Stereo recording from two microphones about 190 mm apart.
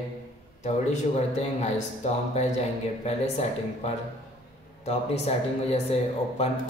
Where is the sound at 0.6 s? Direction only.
35° left (ahead or behind).